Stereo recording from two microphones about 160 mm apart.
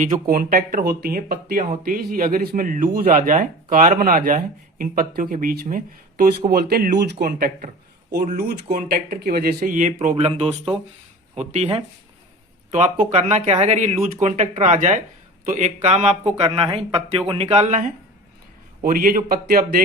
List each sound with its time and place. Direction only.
0.0 s speech: 55° right (ahead or behind)
6.5 s speech: 70° right (ahead or behind); by 10.2 s 55° right (ahead or behind)
10.2 s speech: 40° right (ahead or behind)
18.8 s speech: 65° right (ahead or behind)